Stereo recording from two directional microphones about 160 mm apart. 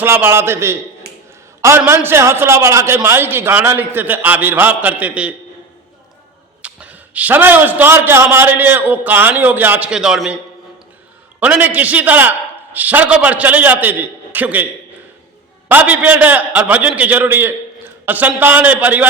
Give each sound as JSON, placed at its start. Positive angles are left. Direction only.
{"t": 0.0, "sound": "a man's voice", "side_deg": -15}
{"t": 1.8, "sound": "a man's voice", "side_deg": -15}
{"t": 6.6, "sound": "a man's voice", "side_deg": -5}
{"t": 11.3, "sound": "a man's voice", "side_deg": -10}
{"t": 15.7, "sound": "a man's voice", "side_deg": -10}